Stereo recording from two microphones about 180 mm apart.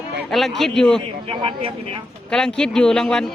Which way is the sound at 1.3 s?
30° right (ahead or behind).